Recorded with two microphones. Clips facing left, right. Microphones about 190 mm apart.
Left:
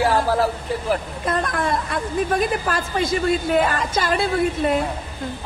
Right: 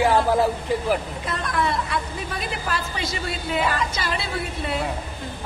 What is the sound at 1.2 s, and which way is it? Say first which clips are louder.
A woman's voice: left 3 dB; 50° left (ahead or behind).